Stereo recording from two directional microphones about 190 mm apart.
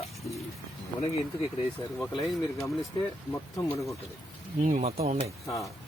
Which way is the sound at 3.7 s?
15° left (ahead or behind).